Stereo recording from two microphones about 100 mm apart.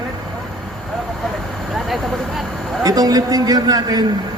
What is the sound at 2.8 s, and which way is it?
A man's voice, 40° right (ahead or behind).